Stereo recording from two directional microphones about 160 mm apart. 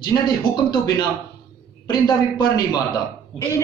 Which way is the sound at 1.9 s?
25° left (ahead or behind).